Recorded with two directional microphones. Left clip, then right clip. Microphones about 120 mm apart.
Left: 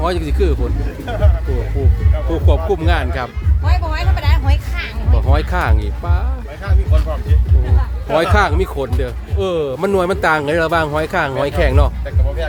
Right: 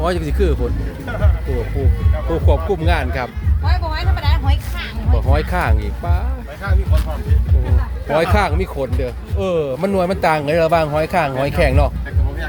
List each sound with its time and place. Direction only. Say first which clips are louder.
0.0 s speech: left 1 dB; centre (ahead or behind)
2.3 s speech: even; 10° left (ahead or behind)
3.9 s music: left 1 dB; 40° left (ahead or behind)
5.1 s speech: even; 10° left (ahead or behind)
8.1 s speech: left 2 dB; 15° left (ahead or behind)